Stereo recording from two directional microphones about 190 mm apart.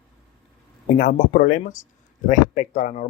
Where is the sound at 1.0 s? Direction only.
50° left (ahead or behind).